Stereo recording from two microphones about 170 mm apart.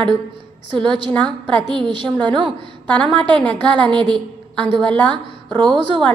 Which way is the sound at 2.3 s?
30° right (ahead or behind).